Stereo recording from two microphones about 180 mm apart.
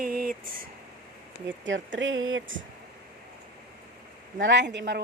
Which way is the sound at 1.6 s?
90° right.